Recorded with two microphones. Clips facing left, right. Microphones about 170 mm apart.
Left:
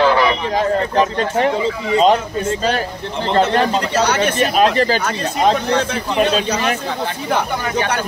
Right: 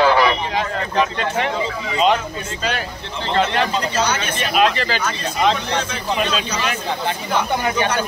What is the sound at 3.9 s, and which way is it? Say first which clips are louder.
Speech: left 4 dB; 65° left (ahead or behind).